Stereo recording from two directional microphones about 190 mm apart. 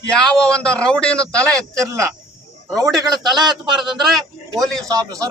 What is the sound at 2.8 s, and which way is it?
A man's voice, centre (ahead or behind).